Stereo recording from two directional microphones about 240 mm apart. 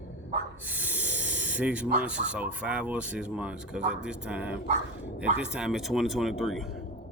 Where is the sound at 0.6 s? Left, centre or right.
Centre.